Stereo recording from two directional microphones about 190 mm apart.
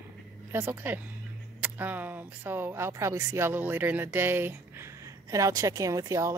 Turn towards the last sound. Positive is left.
turn(degrees=-15)  # may be behind; listen again after turning